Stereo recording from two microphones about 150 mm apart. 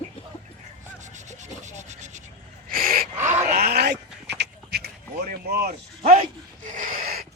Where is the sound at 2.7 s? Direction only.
75° right (ahead or behind).